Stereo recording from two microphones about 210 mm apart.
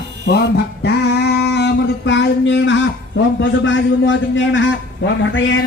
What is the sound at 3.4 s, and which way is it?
A man's voice, 60° left (ahead or behind).